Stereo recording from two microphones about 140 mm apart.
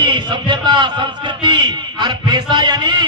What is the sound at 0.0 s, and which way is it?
Speech, 35° right (ahead or behind).